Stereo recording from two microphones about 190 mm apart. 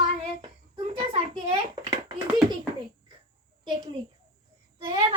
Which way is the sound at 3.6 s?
25° right (ahead or behind).